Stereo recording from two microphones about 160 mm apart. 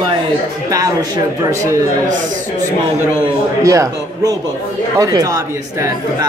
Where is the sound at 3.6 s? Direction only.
20° right (ahead or behind).